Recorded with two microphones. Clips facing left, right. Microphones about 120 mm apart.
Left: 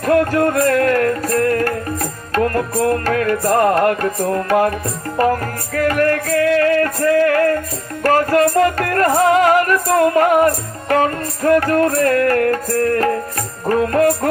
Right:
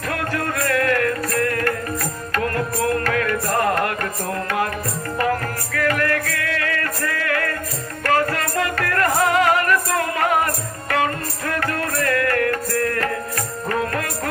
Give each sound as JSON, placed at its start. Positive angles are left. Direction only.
{"t": 0.0, "sound": "music", "side_deg": 35}
{"t": 5.7, "sound": "music", "side_deg": 35}